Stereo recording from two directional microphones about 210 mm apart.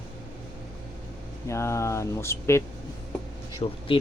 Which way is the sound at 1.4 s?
15° left (ahead or behind).